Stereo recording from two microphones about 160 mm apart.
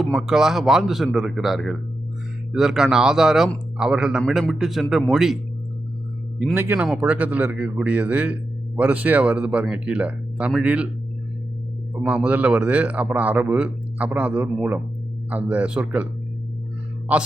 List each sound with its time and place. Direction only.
0.0 s speech: centre (ahead or behind)
6.4 s speech: 10° right (ahead or behind)
11.9 s speech: 10° right (ahead or behind)
17.1 s speech: 10° right (ahead or behind)